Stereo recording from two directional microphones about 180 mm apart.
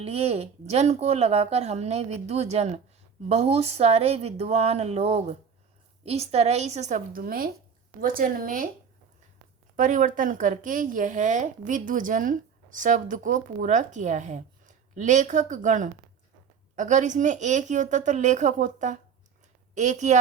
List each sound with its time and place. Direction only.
0.0 s a woman's voice: 35° right (ahead or behind)
9.7 s a woman's voice: 45° right (ahead or behind)